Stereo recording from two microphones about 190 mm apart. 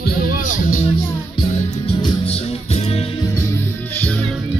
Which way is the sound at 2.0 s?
30° left (ahead or behind).